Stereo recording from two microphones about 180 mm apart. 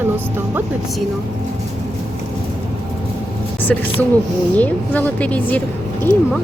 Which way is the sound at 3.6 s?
10° left (ahead or behind).